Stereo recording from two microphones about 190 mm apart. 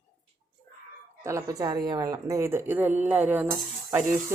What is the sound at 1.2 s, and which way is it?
A woman's voice, 15° right (ahead or behind).